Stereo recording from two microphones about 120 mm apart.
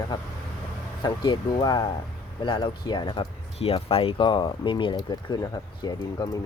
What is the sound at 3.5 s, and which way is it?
Speech, 55° left (ahead or behind).